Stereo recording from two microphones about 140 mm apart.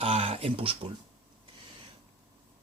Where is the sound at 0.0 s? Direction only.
45° right (ahead or behind).